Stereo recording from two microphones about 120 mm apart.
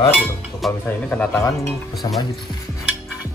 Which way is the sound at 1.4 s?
25° left (ahead or behind).